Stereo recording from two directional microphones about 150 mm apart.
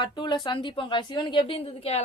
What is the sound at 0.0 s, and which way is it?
A woman's voice, 30° left (ahead or behind).